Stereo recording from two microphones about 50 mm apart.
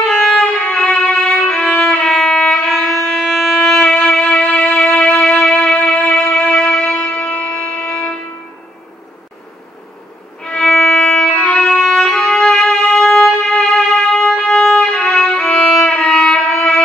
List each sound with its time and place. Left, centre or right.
0.0 s violin: centre
2.7 s music: centre
3.5 s violin: centre
4.2 s music: left
6.2 s music: left
7.5 s a sound: centre
10.4 s violin: centre
15.0 s music: centre
15.5 s violin: centre